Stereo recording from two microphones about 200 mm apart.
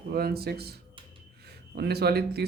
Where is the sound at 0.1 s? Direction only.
50° right (ahead or behind).